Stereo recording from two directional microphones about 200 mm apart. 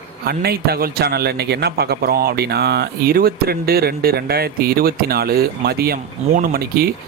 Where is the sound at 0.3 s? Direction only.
50° right (ahead or behind).